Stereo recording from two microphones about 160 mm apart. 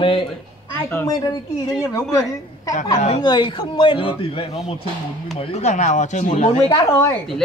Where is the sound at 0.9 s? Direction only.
20° left (ahead or behind); by 6.7 s 45° left (ahead or behind).